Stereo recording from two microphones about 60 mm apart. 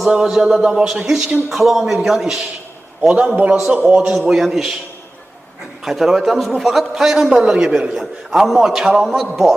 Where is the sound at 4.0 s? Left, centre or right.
Centre.